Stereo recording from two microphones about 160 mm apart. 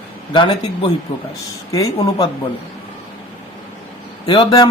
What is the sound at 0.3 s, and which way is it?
Speech, 30° left (ahead or behind).